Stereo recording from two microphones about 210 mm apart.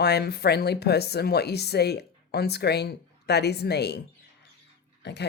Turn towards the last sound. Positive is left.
turn(degrees=55)  # may be behind; listen again after turning